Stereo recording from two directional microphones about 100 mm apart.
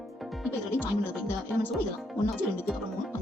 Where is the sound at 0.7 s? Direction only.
25° left (ahead or behind).